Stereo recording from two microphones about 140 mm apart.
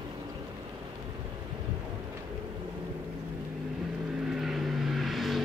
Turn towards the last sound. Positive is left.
turn(degrees=0)  # may be behind; listen again after turning